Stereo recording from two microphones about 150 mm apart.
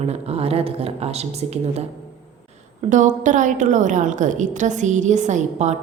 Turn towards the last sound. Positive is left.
turn(degrees=-50)  # may be behind; listen again after turning